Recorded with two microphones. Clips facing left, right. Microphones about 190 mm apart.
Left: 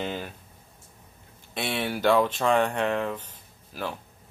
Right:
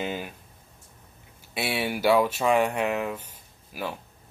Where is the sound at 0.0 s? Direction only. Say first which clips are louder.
Right 1 dB; 10° right (ahead or behind).